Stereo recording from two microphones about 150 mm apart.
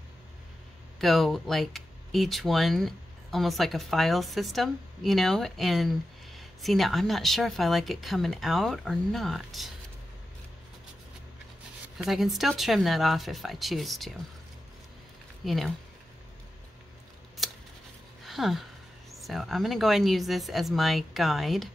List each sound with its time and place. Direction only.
0.9 s speech: centre (ahead or behind)
12.0 s speech: centre (ahead or behind)
15.4 s speech: centre (ahead or behind)
17.4 s scissors: centre (ahead or behind)
18.2 s speech: centre (ahead or behind)